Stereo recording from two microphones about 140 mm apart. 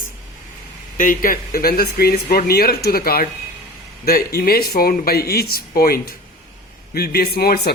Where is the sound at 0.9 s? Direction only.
75° left (ahead or behind).